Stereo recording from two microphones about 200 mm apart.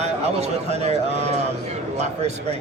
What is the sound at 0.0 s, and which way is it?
Speech, 35° right (ahead or behind).